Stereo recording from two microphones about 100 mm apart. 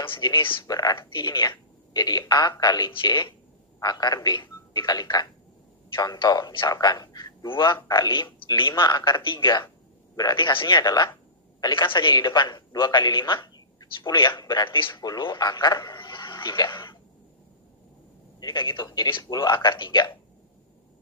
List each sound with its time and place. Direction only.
0.0 s a man's voice: 55° left (ahead or behind)
0.7 s speech: 40° left (ahead or behind)
0.9 s a man's voice: 50° left (ahead or behind)
10.8 s a man's voice: 45° left (ahead or behind)
18.4 s a man's voice: 55° left (ahead or behind)